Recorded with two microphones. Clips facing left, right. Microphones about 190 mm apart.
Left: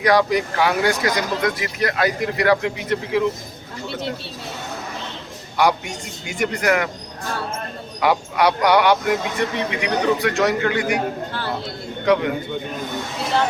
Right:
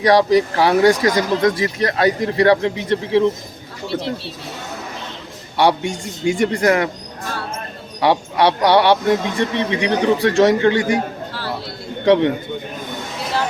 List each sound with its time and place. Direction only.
0.0 s speech: 35° right (ahead or behind)
5.5 s speech: 30° right (ahead or behind)
8.0 s speech: 30° right (ahead or behind)
12.0 s speech: 25° right (ahead or behind)